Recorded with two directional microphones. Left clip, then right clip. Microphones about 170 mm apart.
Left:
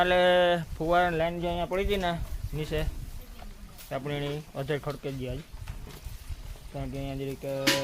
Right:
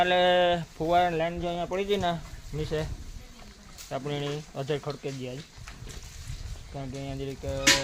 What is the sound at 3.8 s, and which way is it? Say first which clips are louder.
Speech: right 1 dB; 25° right (ahead or behind).